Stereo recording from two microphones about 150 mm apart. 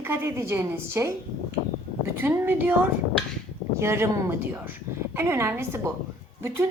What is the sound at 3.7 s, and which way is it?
A woman's voice, 20° right (ahead or behind).